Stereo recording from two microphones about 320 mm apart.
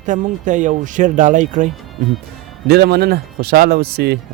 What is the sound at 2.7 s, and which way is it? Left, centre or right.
Speech, right.